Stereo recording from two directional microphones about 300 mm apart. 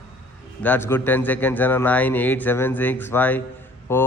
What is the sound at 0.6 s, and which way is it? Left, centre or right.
Speech, centre.